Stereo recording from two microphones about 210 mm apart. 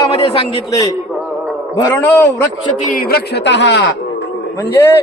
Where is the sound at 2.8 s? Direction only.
40° left (ahead or behind); by 3.8 s 55° left (ahead or behind).